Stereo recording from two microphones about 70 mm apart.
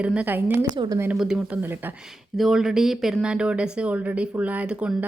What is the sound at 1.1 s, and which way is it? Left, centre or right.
Speech, centre.